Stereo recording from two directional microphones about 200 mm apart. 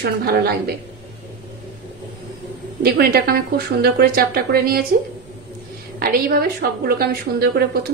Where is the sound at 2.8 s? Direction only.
50° right (ahead or behind).